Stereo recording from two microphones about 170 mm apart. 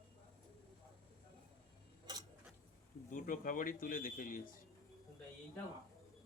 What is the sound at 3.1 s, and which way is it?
Speech, 50° left (ahead or behind).